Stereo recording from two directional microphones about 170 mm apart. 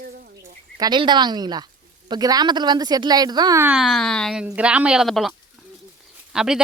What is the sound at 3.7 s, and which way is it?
A woman's voice, centre (ahead or behind).